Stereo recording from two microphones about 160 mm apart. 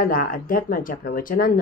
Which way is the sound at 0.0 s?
65° left (ahead or behind).